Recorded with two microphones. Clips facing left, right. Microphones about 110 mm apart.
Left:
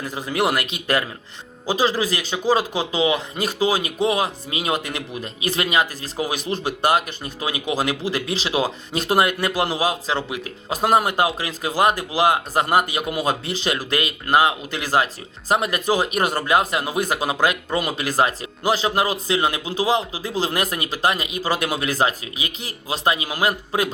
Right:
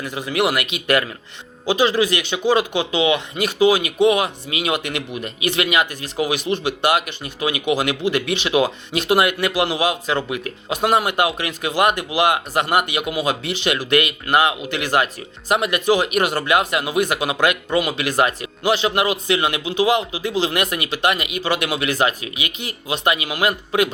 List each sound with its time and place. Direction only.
0.0 s a man's voice: 40° left (ahead or behind)